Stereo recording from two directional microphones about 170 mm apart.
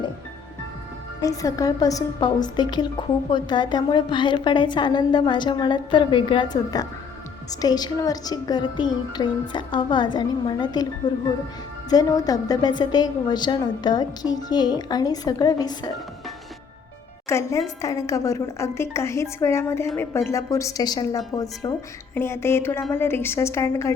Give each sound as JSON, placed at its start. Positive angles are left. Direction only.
{"t": 1.2, "sound": "a woman's voice", "side_deg": 20}
{"t": 11.9, "sound": "a woman's voice", "side_deg": 20}
{"t": 17.2, "sound": "a woman's voice", "side_deg": 15}